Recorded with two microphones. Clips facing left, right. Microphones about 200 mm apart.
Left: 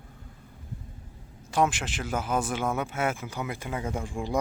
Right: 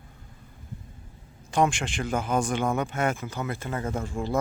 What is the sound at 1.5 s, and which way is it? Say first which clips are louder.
A man's voice: right 2 dB; 5° left (ahead or behind).